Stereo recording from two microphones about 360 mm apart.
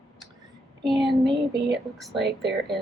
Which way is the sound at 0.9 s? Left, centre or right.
Centre.